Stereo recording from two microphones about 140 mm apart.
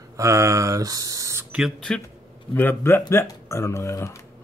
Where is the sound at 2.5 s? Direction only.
15° left (ahead or behind).